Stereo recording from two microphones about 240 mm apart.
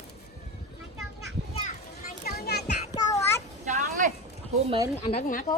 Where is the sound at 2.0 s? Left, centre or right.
Left.